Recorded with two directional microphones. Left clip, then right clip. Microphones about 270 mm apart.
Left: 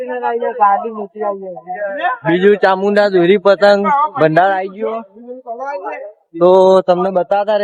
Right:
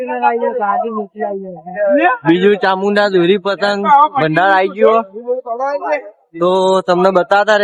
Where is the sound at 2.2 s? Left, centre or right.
Centre.